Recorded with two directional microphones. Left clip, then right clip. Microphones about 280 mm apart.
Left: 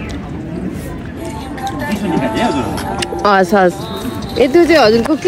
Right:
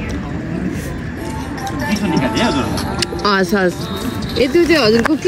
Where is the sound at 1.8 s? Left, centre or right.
Centre.